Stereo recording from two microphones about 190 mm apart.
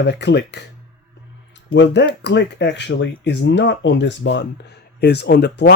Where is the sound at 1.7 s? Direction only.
65° left (ahead or behind).